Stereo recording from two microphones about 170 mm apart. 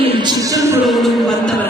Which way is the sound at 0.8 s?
Centre (ahead or behind).